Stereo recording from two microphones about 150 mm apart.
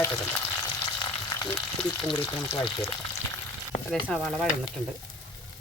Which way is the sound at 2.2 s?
25° left (ahead or behind).